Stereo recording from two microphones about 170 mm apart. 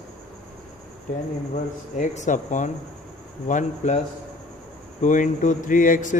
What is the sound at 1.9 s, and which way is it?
Speech, 45° left (ahead or behind).